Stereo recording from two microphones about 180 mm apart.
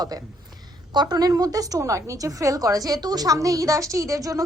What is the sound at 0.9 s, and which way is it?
A woman's voice, 25° right (ahead or behind).